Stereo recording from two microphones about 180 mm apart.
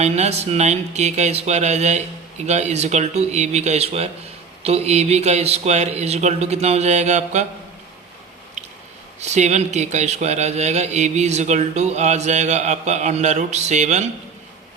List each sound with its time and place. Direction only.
0.0 s speech: 40° right (ahead or behind)
8.6 s biting: 40° right (ahead or behind)
9.2 s speech: 40° right (ahead or behind)